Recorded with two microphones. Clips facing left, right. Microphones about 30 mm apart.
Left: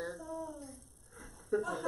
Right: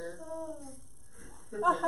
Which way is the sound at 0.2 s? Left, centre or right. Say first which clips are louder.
Right 2 dB; centre.